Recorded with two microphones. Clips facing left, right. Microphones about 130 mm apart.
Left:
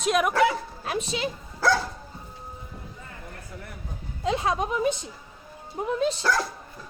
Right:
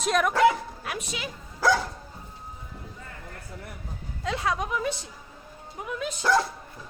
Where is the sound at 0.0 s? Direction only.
5° left (ahead or behind).